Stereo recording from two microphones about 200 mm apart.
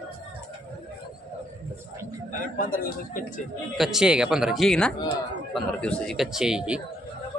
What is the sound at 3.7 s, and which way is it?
Speech, centre (ahead or behind).